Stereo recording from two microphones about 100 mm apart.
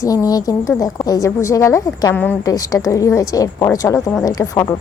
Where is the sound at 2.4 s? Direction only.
35° left (ahead or behind).